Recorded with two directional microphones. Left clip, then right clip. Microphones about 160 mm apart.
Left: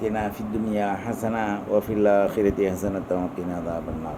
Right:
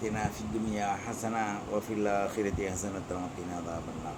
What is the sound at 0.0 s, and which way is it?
Speech, 60° left (ahead or behind).